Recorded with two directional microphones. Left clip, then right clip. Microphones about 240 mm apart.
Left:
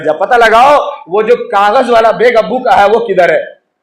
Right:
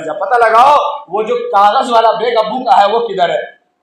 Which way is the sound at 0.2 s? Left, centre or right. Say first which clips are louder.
Left 2 dB; left.